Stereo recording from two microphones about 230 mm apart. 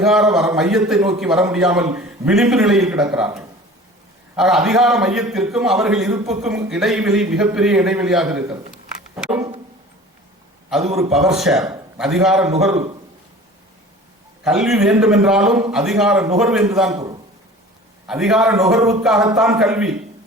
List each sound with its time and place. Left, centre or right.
0.0 s a man's voice: centre
9.1 s a sound: centre
10.7 s a man's voice: centre
12.7 s a man's voice: right
14.4 s a man's voice: centre
18.1 s a man's voice: centre